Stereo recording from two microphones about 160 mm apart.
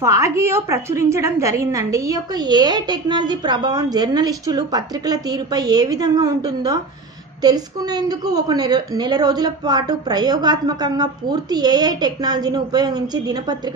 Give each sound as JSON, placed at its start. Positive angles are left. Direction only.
{"t": 0.0, "sound": "a woman's voice", "side_deg": -20}